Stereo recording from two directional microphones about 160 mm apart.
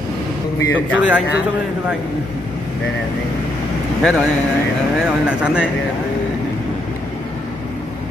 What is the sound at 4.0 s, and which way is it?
Speech, centre (ahead or behind).